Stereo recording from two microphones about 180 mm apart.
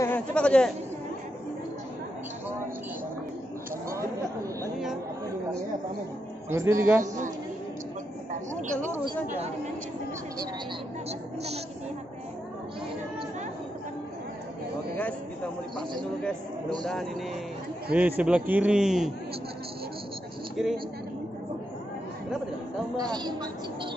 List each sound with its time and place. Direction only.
0.0 s speech: 10° left (ahead or behind)
6.5 s a man's voice: 15° right (ahead or behind)
7.0 s speech: 45° right (ahead or behind)
8.3 s a sound: 45° right (ahead or behind)
11.1 s a woman's voice: 35° right (ahead or behind)
16.8 s a man's voice: centre (ahead or behind)
17.9 s a man's voice: 10° right (ahead or behind)
20.6 s a man's voice: centre (ahead or behind)
22.9 s speech: 25° right (ahead or behind)